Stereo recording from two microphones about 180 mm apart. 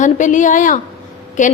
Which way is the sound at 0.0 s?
45° left (ahead or behind).